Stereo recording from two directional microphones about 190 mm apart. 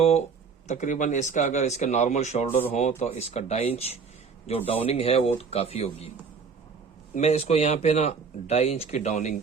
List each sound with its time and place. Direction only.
0.7 s speech: 40° left (ahead or behind)
7.1 s speech: 35° left (ahead or behind)